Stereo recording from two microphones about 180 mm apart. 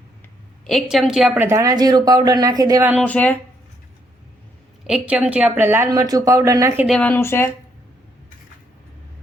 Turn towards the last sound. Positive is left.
turn(degrees=15)  # may be behind; listen again after turning